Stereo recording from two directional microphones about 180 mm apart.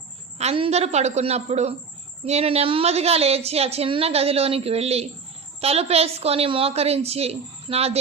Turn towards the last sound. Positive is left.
turn(degrees=-35)  # may be behind; listen again after turning